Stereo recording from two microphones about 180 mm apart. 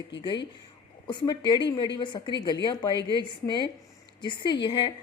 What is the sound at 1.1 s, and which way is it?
A woman's voice, 25° left (ahead or behind).